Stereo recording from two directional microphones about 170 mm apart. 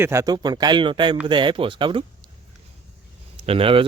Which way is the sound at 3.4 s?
35° right (ahead or behind).